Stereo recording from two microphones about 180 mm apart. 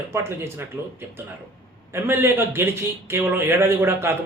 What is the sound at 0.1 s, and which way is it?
Speech, 15° right (ahead or behind).